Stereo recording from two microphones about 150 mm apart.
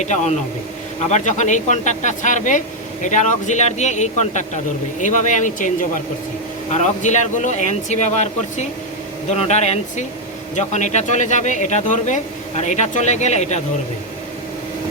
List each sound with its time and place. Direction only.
0.0 s speech: 50° left (ahead or behind)